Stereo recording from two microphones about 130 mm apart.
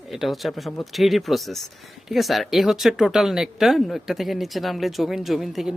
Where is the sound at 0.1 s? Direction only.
Centre (ahead or behind).